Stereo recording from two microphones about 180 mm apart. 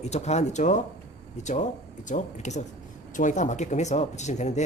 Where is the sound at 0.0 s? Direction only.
40° left (ahead or behind).